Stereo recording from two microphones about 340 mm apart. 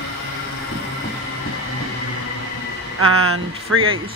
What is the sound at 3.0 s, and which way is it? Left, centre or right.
Speech, right.